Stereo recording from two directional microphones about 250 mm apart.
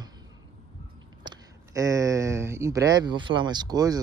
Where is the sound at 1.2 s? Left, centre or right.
Centre.